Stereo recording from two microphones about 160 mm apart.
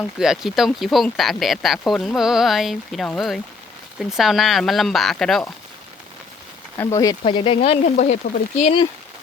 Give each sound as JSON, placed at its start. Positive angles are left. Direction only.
{"t": 0.2, "sound": "speech", "side_deg": 0}
{"t": 6.7, "sound": "speech", "side_deg": 20}
{"t": 7.9, "sound": "speech", "side_deg": 50}